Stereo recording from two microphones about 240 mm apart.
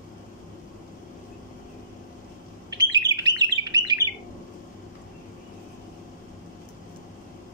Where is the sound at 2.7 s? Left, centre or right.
Centre.